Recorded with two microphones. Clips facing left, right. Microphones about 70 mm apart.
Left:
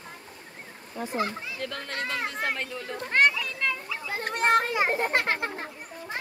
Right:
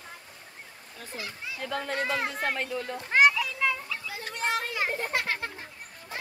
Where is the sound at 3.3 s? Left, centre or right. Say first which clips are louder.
Right 2 dB; centre.